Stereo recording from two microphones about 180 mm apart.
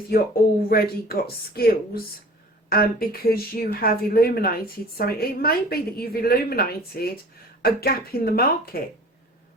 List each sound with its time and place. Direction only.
0.7 s speech: 55° left (ahead or behind)